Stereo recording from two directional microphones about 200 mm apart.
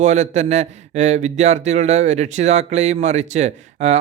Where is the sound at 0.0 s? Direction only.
35° right (ahead or behind).